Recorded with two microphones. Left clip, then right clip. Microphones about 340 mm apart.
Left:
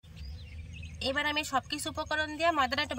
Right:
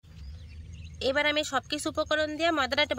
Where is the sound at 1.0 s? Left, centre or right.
Centre.